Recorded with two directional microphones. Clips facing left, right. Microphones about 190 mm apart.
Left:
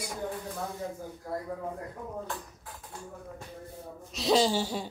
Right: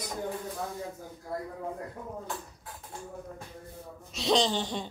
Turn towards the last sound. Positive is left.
turn(degrees=5)  # may be behind; listen again after turning